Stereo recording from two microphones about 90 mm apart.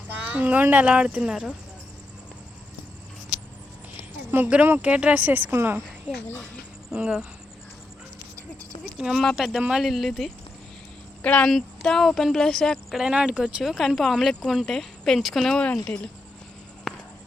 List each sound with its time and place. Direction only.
0.3 s speech: 15° right (ahead or behind)
4.6 s speech: 20° right (ahead or behind)
6.9 s speech: 10° right (ahead or behind)
9.0 s speech: 5° right (ahead or behind)
11.2 s speech: 15° left (ahead or behind)
13.1 s speech: 10° right (ahead or behind); by 15.7 s 5° left (ahead or behind)
16.9 s a sound: centre (ahead or behind)